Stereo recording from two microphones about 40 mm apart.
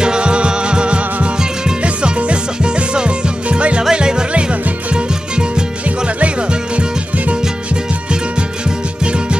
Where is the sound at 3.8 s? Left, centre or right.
Centre.